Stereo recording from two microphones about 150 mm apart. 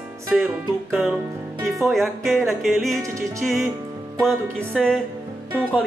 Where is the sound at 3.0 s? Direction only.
20° right (ahead or behind).